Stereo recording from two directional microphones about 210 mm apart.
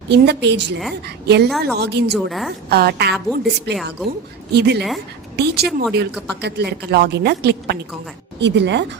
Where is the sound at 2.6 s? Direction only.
50° right (ahead or behind).